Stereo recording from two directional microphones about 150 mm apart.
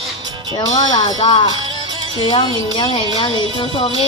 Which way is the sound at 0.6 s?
30° left (ahead or behind).